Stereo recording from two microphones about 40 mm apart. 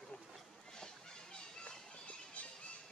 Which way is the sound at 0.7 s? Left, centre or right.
Centre.